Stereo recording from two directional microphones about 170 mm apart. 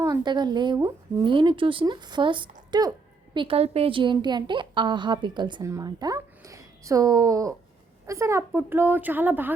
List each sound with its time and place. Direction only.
0.0 s a woman's voice: 25° right (ahead or behind)